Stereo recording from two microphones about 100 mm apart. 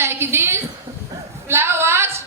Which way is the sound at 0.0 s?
25° right (ahead or behind).